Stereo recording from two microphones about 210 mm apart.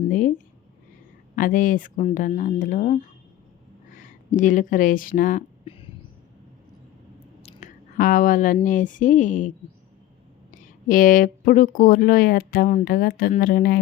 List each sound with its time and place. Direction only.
0.1 s speech: 40° left (ahead or behind)
4.3 s speech: 40° left (ahead or behind)
5.6 s a sound: 25° left (ahead or behind)
7.4 s chewing: 35° left (ahead or behind)
8.6 s speech: 40° left (ahead or behind)
10.5 s speech: 40° left (ahead or behind)